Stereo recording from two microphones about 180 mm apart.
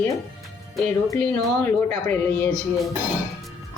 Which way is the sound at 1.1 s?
10° left (ahead or behind).